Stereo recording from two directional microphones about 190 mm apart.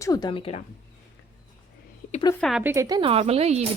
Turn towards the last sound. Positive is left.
turn(degrees=-35)  # may be behind; listen again after turning